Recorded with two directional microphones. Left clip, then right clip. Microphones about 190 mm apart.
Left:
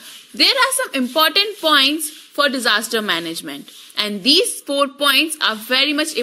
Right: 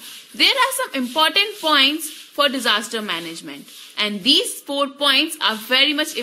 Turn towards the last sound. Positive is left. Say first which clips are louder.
# even
turn(degrees=20)  # may be behind; listen again after turning